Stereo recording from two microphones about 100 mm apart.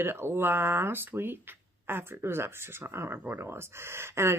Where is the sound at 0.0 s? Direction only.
20° right (ahead or behind).